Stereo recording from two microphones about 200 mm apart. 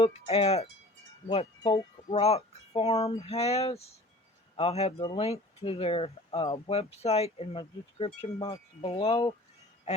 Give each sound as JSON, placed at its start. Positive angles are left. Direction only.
{"t": 0.0, "sound": "wind chime", "side_deg": 30}
{"t": 1.3, "sound": "speech", "side_deg": 30}
{"t": 3.2, "sound": "wind chime", "side_deg": 30}
{"t": 4.5, "sound": "speech", "side_deg": 30}